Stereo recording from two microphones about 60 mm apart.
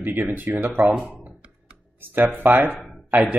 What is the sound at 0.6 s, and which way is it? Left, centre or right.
Speech, right.